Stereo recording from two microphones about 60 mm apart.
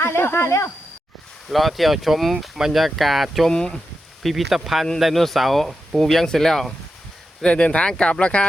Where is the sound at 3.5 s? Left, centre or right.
Centre.